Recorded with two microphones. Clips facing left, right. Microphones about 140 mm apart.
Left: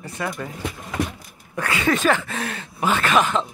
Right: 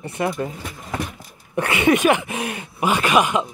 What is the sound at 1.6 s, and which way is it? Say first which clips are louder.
Speech: right 4 dB; 20° right (ahead or behind).